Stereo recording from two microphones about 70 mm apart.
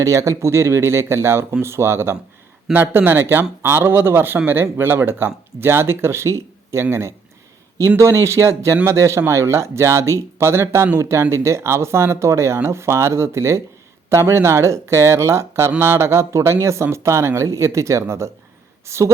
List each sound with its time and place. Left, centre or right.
0.0 s speech: right